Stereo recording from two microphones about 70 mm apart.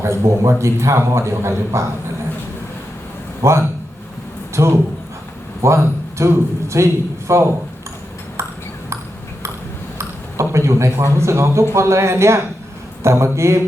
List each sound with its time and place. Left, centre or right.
0.0 s a man's voice: right
3.4 s a man's voice: right
10.0 s a man's voice: right